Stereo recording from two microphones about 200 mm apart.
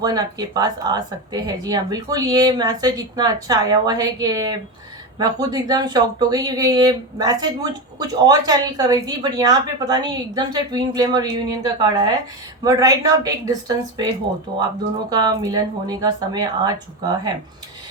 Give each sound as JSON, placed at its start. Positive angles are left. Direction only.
{"t": 0.0, "sound": "speech", "side_deg": -20}